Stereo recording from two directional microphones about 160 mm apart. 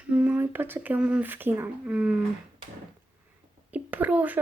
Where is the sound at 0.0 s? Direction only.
10° right (ahead or behind).